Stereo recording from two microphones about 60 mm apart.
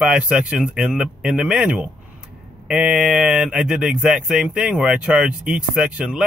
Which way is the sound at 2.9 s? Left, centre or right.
Centre.